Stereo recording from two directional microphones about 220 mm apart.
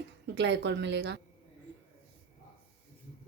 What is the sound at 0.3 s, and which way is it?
Speech, 55° right (ahead or behind).